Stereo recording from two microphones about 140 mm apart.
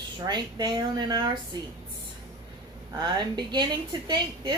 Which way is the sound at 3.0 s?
30° right (ahead or behind).